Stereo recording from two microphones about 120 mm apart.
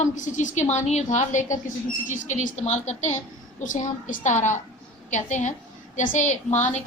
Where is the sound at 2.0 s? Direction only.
90° left.